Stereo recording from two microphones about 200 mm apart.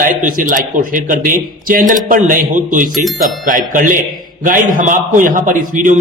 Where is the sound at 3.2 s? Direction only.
40° right (ahead or behind).